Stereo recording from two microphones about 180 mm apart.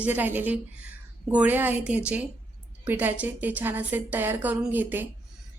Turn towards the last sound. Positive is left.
turn(degrees=-10)  # may be behind; listen again after turning